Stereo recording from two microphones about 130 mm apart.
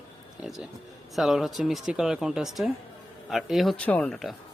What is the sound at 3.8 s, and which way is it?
Speech, 10° left (ahead or behind).